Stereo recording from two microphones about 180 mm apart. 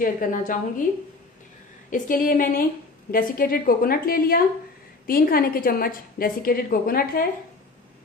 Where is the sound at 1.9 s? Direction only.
50° left (ahead or behind).